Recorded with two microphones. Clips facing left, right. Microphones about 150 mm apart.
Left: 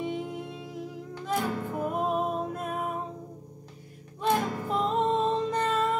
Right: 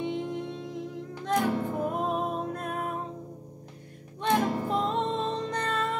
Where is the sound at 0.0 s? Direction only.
5° left (ahead or behind).